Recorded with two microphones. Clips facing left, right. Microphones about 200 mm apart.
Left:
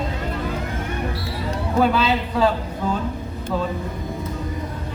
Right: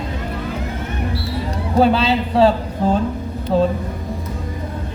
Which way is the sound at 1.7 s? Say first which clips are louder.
Right 4 dB; 30° right (ahead or behind).